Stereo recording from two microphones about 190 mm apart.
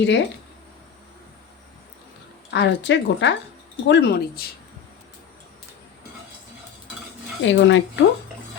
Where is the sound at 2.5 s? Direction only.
70° left (ahead or behind).